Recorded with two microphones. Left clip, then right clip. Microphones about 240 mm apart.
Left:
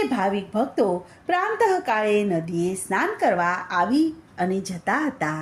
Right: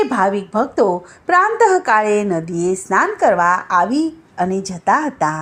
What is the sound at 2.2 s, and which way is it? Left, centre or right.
A woman's voice, right.